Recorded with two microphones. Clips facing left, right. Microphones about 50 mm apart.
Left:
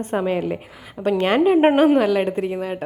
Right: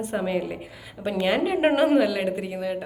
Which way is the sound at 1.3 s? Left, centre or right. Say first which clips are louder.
Left 7 dB; left.